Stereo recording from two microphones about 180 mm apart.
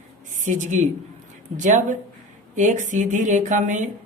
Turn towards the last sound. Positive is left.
turn(degrees=-45)  # may be behind; listen again after turning